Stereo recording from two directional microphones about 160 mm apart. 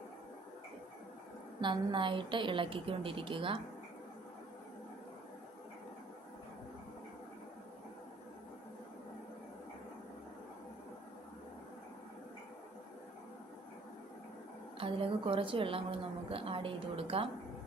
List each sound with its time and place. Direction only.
1.6 s a woman's voice: 30° right (ahead or behind)
14.8 s a woman's voice: 35° right (ahead or behind)